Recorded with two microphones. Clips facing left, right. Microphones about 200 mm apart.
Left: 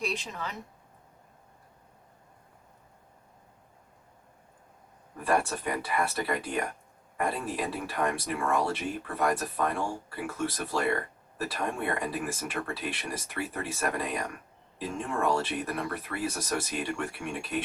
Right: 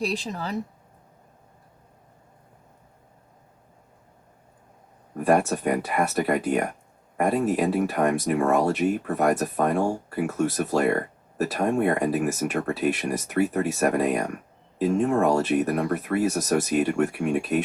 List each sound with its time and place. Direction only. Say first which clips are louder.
0.0 s speech: right 6 dB; 35° right (ahead or behind)
5.1 s speech: right 7 dB; 45° right (ahead or behind)